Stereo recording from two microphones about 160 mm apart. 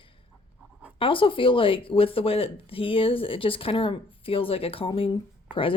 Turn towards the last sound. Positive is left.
turn(degrees=30)  # may be behind; listen again after turning